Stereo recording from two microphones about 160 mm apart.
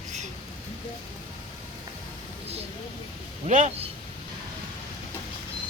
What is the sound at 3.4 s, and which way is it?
Speech, 50° right (ahead or behind).